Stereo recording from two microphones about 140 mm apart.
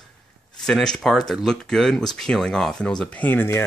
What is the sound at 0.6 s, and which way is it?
Speech, 5° left (ahead or behind).